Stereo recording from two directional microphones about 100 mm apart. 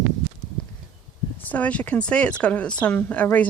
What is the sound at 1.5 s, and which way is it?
Speech, 15° left (ahead or behind).